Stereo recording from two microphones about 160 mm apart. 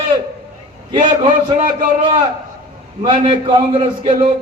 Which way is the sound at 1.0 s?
30° right (ahead or behind).